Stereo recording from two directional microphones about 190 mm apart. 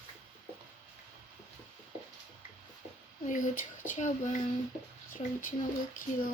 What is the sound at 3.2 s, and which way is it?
Speech, 45° left (ahead or behind).